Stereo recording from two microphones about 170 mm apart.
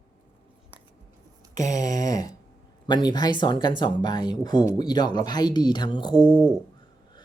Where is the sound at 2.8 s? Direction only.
25° left (ahead or behind).